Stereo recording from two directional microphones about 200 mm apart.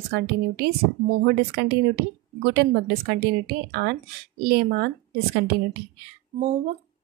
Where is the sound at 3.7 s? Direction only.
55° right (ahead or behind).